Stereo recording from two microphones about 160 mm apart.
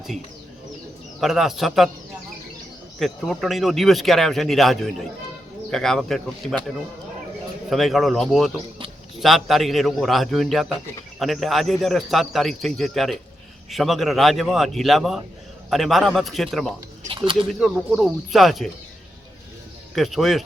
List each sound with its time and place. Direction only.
1.2 s speech: centre (ahead or behind)
3.0 s speech: centre (ahead or behind)
7.7 s speech: centre (ahead or behind)
17.1 s a sound: 35° right (ahead or behind)
17.5 s speech: 5° right (ahead or behind)
20.0 s speech: centre (ahead or behind)